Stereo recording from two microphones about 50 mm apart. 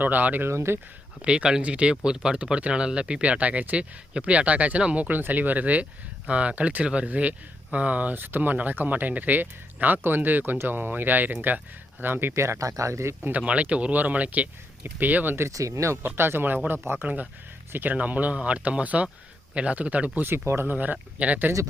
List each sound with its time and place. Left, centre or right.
0.0 s speech: right
0.4 s speech: right
1.2 s speech: centre
8.1 s speech: right
12.3 s speech: right
13.3 s speech: right
15.4 s speech: right
16.0 s speech: right
17.0 s speech: right
17.9 s speech: right
20.2 s speech: right
20.7 s speech: right